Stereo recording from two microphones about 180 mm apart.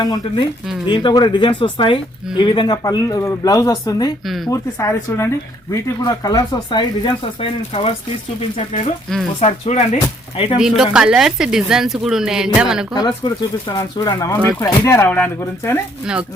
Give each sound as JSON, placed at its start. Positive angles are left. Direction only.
{"t": 0.0, "sound": "speech", "side_deg": 20}
{"t": 10.9, "sound": "speech", "side_deg": -5}
{"t": 12.9, "sound": "speech", "side_deg": 25}
{"t": 14.1, "sound": "speech", "side_deg": 15}